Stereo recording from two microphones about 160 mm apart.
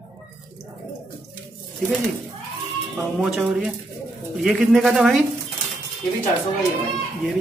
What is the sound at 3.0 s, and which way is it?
Speech, 5° right (ahead or behind).